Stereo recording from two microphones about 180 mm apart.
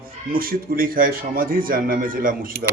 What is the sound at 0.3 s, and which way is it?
A man's voice, 55° right (ahead or behind).